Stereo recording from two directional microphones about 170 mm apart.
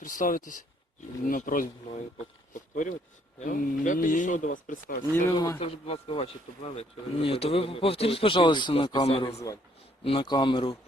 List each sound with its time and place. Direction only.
0.0 s speech: 50° left (ahead or behind)
5.3 s speech: 25° left (ahead or behind)
5.6 s speech: 35° left (ahead or behind)